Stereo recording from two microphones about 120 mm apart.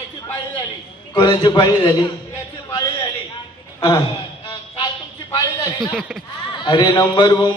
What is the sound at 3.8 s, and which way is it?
Speech, 35° left (ahead or behind).